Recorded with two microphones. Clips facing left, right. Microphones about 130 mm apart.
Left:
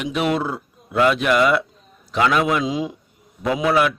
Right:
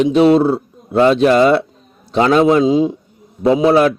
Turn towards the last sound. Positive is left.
turn(degrees=-30)  # may be behind; listen again after turning